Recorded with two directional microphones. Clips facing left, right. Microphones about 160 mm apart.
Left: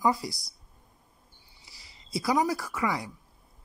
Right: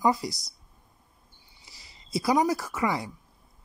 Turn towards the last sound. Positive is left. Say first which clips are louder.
# right 2 dB
turn(degrees=-25)  # may be behind; listen again after turning